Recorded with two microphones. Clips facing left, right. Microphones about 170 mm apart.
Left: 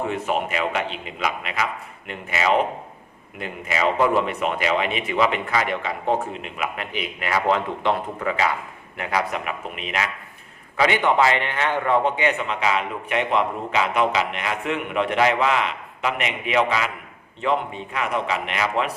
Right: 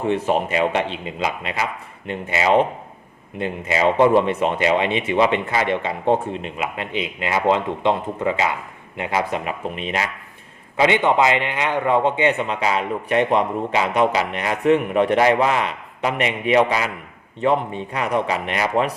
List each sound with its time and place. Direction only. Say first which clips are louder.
0.1 s a man's voice: right 5 dB; 30° right (ahead or behind)